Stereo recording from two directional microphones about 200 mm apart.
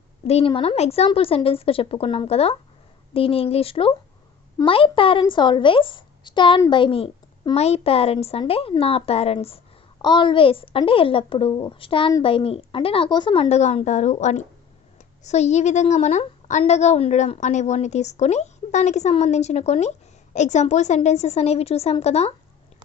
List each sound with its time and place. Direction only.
0.3 s a woman's voice: 30° left (ahead or behind)